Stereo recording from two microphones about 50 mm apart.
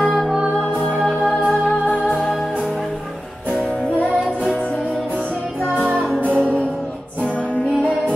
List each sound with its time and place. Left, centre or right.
0.0 s music: centre
1.5 s music: centre
5.8 s music: right